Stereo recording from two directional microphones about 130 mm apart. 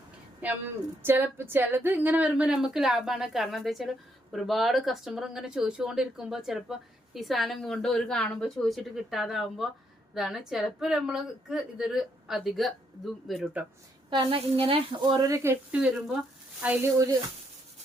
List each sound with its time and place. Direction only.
0.4 s a woman's voice: 10° right (ahead or behind)
14.1 s a woman's voice: 40° right (ahead or behind)
15.1 s speech: 25° right (ahead or behind)
15.7 s speech: 10° right (ahead or behind)